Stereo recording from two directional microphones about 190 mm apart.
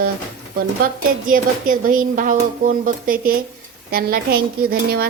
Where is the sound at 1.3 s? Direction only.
45° right (ahead or behind).